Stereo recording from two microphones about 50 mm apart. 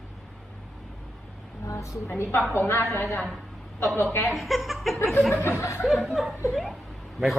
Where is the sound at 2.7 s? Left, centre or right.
Left.